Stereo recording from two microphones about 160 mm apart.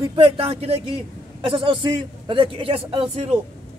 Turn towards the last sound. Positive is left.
turn(degrees=-35)  # may be behind; listen again after turning